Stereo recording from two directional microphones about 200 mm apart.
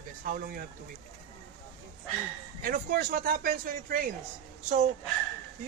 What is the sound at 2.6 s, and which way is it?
Speech, 45° right (ahead or behind).